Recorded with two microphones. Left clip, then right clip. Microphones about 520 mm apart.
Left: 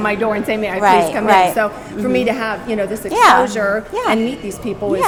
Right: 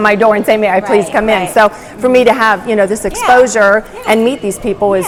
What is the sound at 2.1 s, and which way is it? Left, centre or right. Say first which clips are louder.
A woman's voice: right 10 dB; right.